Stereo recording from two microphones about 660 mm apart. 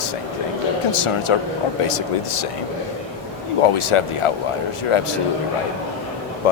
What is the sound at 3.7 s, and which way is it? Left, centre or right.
Speech, left.